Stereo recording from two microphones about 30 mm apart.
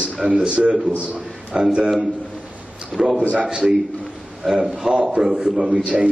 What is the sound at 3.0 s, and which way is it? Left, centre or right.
Speech, centre.